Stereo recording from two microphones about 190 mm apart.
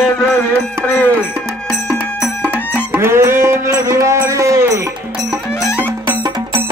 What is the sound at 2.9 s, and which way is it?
Music, 15° right (ahead or behind).